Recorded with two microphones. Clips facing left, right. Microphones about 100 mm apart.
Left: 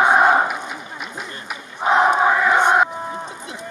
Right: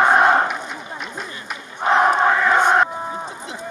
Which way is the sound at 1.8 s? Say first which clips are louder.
Even; 10° left (ahead or behind).